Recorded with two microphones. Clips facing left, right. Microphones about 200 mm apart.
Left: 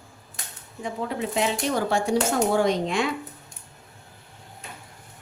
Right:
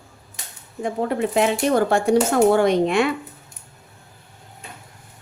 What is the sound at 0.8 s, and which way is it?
A woman's voice, 55° right (ahead or behind).